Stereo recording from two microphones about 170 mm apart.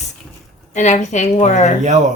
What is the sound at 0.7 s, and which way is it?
A woman's voice, 45° left (ahead or behind).